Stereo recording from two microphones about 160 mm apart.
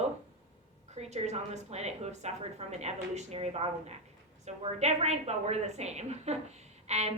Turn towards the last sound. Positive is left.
turn(degrees=-45)  # may be behind; listen again after turning